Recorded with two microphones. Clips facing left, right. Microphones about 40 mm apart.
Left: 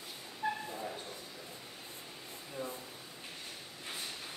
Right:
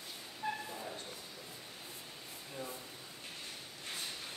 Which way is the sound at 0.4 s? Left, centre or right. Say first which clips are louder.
Left 3 dB; centre.